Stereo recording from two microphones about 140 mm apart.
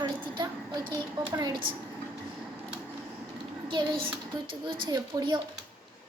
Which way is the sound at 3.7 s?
35° right (ahead or behind).